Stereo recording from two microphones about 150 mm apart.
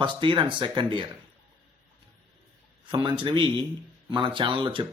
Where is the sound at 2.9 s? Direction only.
30° right (ahead or behind).